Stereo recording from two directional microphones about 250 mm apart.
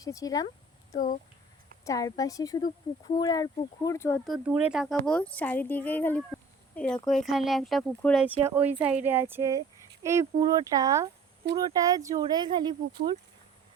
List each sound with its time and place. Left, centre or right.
0.0 s speech: centre
0.9 s speech: left
1.8 s speech: centre
4.3 s speech: centre